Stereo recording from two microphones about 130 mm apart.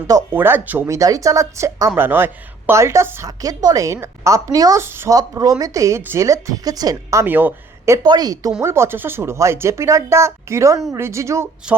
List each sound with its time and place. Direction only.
0.3 s speech: 15° right (ahead or behind)
0.9 s a woman's voice: 25° right (ahead or behind)
8.0 s a woman's voice: 30° right (ahead or behind)